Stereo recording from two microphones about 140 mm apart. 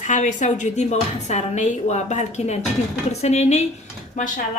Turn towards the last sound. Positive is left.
turn(degrees=65)  # may be behind; listen again after turning